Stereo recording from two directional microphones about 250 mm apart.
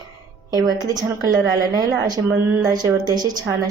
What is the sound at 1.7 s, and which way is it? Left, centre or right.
A woman's voice, centre.